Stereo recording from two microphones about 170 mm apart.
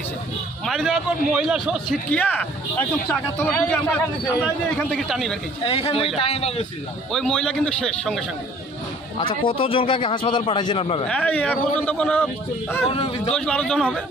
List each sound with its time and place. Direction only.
0.7 s a man's voice: centre (ahead or behind)
2.0 s a man's voice: 10° left (ahead or behind)
5.6 s a man's voice: 35° left (ahead or behind)
7.1 s a man's voice: 5° left (ahead or behind)
9.3 s a man's voice: 30° left (ahead or behind)
11.1 s speech: 10° left (ahead or behind)
12.9 s a man's voice: 35° left (ahead or behind)
13.3 s a man's voice: 5° left (ahead or behind)